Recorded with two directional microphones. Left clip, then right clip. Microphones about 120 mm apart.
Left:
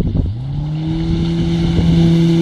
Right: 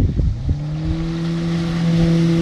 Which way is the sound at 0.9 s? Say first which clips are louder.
Left 5 dB; 25° right (ahead or behind).